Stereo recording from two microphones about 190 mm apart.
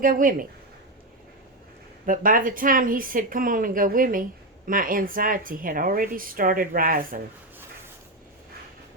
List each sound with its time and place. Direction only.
0.0 s speech: 45° right (ahead or behind)
2.0 s speech: 45° right (ahead or behind)